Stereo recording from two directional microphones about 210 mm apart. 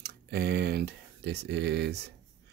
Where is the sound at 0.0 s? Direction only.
50° right (ahead or behind).